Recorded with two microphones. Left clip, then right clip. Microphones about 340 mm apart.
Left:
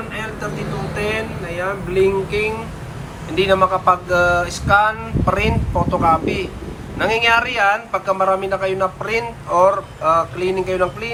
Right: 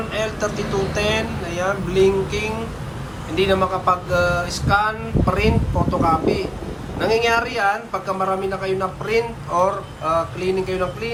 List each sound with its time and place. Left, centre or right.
0.1 s vehicle: centre
0.9 s a man's voice: centre